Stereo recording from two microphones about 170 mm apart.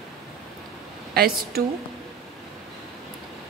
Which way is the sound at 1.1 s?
65° right (ahead or behind).